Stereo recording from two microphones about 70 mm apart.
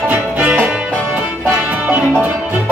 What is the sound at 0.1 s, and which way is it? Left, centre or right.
Music, right.